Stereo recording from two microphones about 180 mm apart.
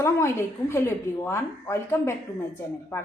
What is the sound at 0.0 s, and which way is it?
A woman's voice, 15° left (ahead or behind).